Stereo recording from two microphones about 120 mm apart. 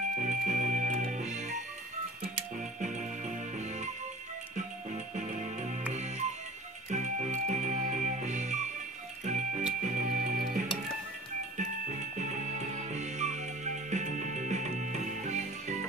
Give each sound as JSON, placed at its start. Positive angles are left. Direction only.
{"t": 0.1, "sound": "music", "side_deg": -90}
{"t": 2.8, "sound": "music", "side_deg": -85}
{"t": 3.5, "sound": "music", "side_deg": -75}
{"t": 11.5, "sound": "music", "side_deg": -80}